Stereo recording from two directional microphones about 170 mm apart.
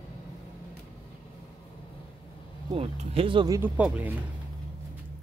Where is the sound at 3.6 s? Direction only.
10° right (ahead or behind).